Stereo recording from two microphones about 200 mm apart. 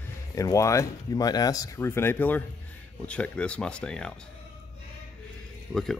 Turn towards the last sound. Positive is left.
turn(degrees=0)  # may be behind; listen again after turning